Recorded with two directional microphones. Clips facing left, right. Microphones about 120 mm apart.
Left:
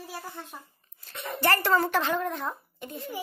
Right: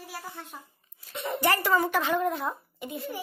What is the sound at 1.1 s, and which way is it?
A woman's voice, 15° right (ahead or behind).